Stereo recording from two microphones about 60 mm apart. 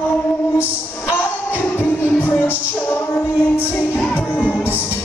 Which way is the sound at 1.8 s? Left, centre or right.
Left.